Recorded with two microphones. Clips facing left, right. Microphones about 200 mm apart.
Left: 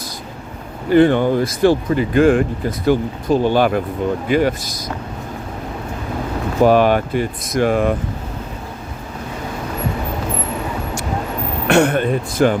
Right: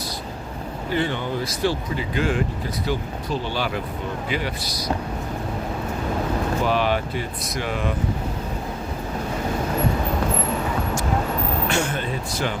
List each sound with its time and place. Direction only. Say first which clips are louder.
0.9 s speech: left 13 dB; 55° left (ahead or behind)
6.7 s speech: left 12 dB; 50° left (ahead or behind)
11.7 s speech: left 10 dB; 60° left (ahead or behind)